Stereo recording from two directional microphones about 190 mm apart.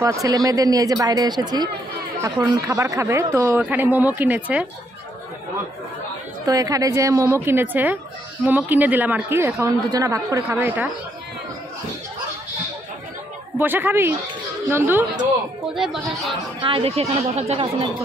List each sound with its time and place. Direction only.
0.0 s speech: 15° right (ahead or behind)
6.4 s speech: 20° right (ahead or behind)
13.6 s speech: 10° right (ahead or behind)
15.7 s speech: centre (ahead or behind)
16.6 s speech: 30° right (ahead or behind)